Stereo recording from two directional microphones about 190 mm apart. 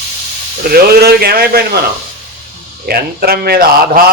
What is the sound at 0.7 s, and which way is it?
Speech, 55° right (ahead or behind).